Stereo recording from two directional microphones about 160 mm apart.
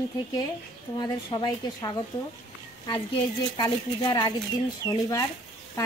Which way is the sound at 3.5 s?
25° left (ahead or behind).